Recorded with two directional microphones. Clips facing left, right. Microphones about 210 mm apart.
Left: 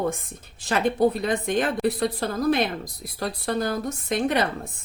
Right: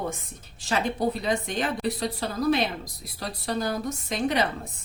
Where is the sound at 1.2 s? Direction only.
55° left (ahead or behind).